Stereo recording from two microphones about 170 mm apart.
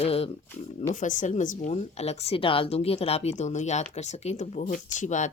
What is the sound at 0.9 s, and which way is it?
Speech, 50° left (ahead or behind).